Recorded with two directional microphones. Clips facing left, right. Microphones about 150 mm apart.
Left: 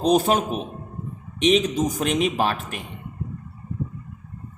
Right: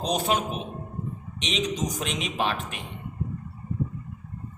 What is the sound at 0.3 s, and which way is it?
Speech, 45° left (ahead or behind).